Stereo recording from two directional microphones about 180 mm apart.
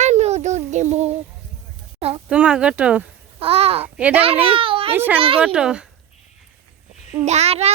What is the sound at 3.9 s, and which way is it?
Speech, 5° right (ahead or behind).